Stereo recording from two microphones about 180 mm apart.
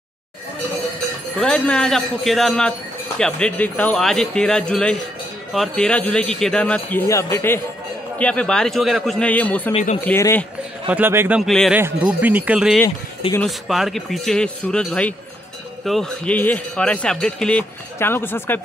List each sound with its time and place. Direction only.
1.4 s a man's voice: 5° left (ahead or behind)
9.7 s speech: 40° left (ahead or behind)
10.0 s a man's voice: 15° left (ahead or behind)
10.9 s a man's voice: 10° right (ahead or behind); by 18.6 s 10° left (ahead or behind)